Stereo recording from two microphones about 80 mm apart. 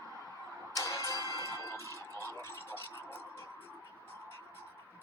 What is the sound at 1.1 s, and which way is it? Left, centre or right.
Music, right.